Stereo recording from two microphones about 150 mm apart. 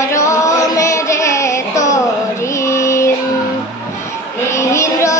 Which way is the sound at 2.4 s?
20° left (ahead or behind).